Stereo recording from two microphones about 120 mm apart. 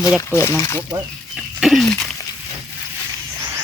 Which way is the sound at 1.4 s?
Centre (ahead or behind).